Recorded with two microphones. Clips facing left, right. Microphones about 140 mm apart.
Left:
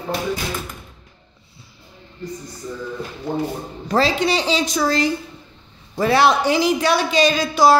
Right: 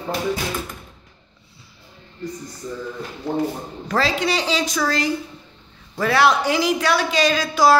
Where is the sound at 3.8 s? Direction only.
25° left (ahead or behind).